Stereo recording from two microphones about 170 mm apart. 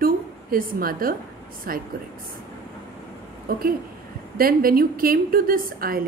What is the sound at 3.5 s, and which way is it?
A woman's voice, 60° right (ahead or behind).